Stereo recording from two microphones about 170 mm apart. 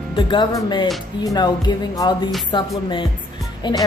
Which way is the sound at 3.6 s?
25° left (ahead or behind).